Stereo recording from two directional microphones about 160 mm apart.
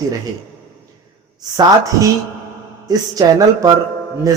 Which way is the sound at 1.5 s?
20° right (ahead or behind).